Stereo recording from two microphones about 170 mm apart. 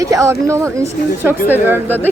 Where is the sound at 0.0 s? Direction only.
20° right (ahead or behind).